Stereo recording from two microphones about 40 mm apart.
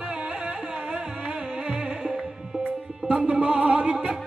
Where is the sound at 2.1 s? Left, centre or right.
Centre.